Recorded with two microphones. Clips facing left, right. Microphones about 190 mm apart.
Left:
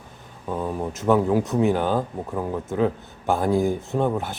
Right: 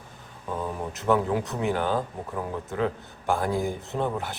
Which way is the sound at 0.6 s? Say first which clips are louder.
Left 5 dB; 15° left (ahead or behind).